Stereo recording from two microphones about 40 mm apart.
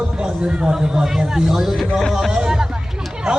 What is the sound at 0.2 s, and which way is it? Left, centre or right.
Speech, right.